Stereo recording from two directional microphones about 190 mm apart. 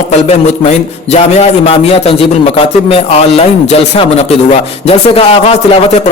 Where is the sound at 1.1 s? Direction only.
35° left (ahead or behind).